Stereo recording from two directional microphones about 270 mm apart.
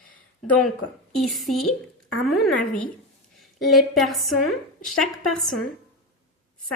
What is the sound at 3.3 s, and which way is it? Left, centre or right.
A woman's voice, centre.